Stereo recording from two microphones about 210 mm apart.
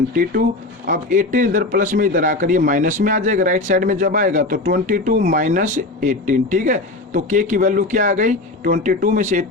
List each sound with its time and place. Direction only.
0.9 s a man's voice: 40° right (ahead or behind)